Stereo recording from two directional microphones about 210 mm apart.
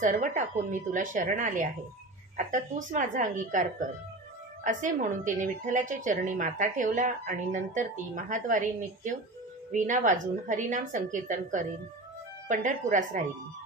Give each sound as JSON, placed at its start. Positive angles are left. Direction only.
{"t": 0.0, "sound": "a woman's voice", "side_deg": -35}